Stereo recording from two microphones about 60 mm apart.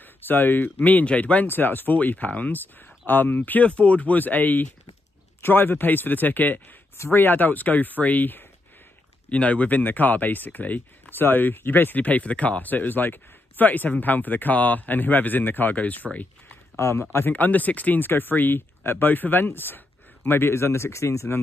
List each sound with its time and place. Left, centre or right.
0.0 s speech: left
16.7 s speech: left